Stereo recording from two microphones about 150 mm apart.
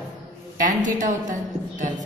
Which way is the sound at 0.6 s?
60° right (ahead or behind).